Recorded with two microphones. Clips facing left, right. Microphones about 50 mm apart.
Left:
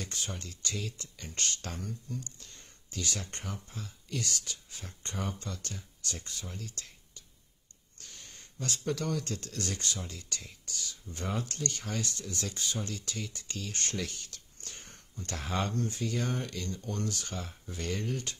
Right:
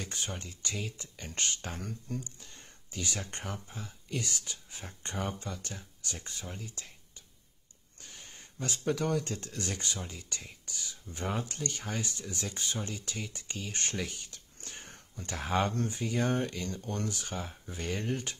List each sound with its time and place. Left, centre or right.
0.0 s speech: right
1.8 s speech: right
2.1 s speech: centre
6.5 s a sound: centre
8.0 s speech: centre
15.3 s speech: centre
15.9 s speech: right
17.1 s speech: centre